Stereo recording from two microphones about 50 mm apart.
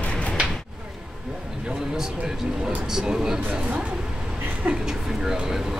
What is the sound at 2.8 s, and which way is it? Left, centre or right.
Speech, centre.